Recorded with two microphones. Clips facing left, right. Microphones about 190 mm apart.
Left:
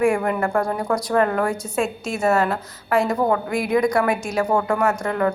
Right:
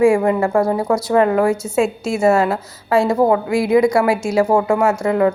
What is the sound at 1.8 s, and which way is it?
Speech, 10° right (ahead or behind).